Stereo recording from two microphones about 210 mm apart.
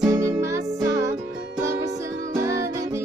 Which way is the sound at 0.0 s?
15° right (ahead or behind).